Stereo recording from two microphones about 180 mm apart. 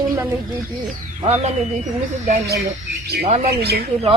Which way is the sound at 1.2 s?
40° right (ahead or behind).